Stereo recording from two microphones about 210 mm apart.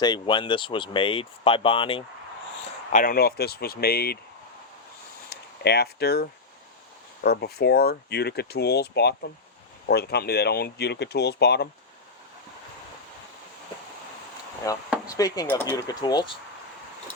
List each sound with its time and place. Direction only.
0.0 s speech: 20° left (ahead or behind)
2.9 s speech: 40° left (ahead or behind)
5.3 s speech: 50° left (ahead or behind)
14.7 s speech: 15° left (ahead or behind)